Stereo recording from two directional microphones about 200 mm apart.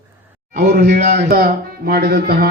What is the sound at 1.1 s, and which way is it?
Speech, 45° right (ahead or behind).